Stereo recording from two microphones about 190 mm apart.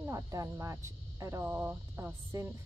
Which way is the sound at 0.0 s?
15° right (ahead or behind).